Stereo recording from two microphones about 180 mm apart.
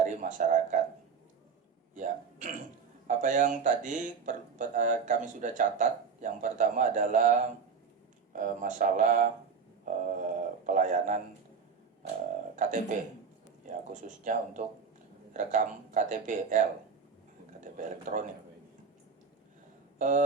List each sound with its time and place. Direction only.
0.0 s speech: 45° right (ahead or behind)
2.0 s hiccup: 45° right (ahead or behind)
3.1 s speech: 45° right (ahead or behind)
8.4 s speech: 45° right (ahead or behind)
12.5 s speech: 45° right (ahead or behind)
20.0 s speech: 45° right (ahead or behind)